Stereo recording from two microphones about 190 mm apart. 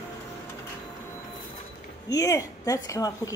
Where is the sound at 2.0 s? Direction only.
15° left (ahead or behind).